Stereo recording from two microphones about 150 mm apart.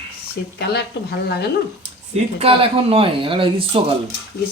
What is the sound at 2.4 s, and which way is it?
Speech, 35° right (ahead or behind).